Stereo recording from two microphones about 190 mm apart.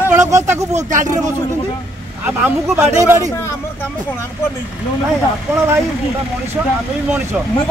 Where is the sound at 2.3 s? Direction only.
10° right (ahead or behind).